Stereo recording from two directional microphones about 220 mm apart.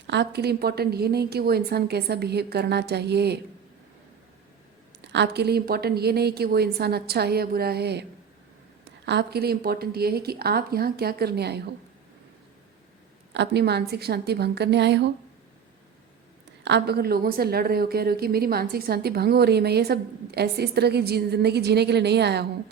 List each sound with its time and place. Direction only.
0.1 s a woman's voice: 50° right (ahead or behind)
5.0 s a woman's voice: 50° right (ahead or behind)
9.0 s a woman's voice: 50° right (ahead or behind)
13.3 s a woman's voice: 50° right (ahead or behind)
16.6 s a woman's voice: 50° right (ahead or behind)